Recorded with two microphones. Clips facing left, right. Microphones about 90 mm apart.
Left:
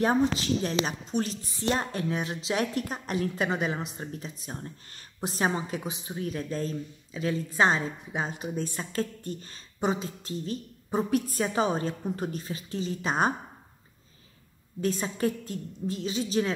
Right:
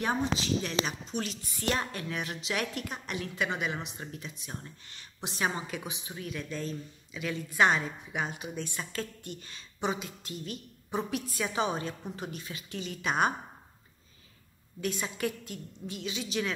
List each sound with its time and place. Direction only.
0.0 s a woman's voice: 40° left (ahead or behind)
5.5 s a woman's voice: 25° left (ahead or behind)
14.8 s a woman's voice: 35° left (ahead or behind)